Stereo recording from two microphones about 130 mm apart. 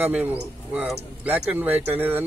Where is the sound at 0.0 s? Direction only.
10° right (ahead or behind).